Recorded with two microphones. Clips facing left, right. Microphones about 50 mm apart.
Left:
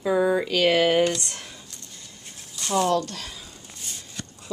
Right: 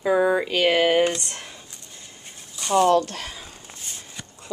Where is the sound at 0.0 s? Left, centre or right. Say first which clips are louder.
Right 2 dB; centre.